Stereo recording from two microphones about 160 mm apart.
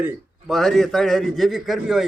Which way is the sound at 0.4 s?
Centre (ahead or behind).